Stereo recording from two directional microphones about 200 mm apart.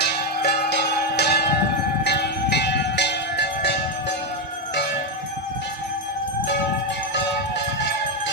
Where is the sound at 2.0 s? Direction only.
55° left (ahead or behind).